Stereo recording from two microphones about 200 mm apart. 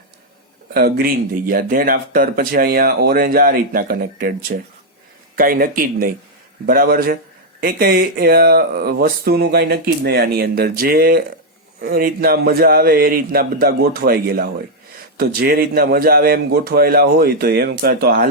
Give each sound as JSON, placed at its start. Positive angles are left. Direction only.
{"t": 0.7, "sound": "speech", "side_deg": -50}